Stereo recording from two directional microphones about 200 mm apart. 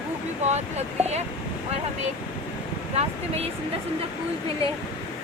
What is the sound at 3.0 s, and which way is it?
Speech, 30° right (ahead or behind).